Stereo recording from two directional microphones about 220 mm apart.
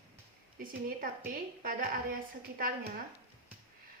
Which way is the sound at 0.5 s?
40° right (ahead or behind).